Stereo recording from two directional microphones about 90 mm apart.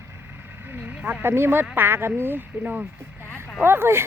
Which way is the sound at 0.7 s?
20° right (ahead or behind).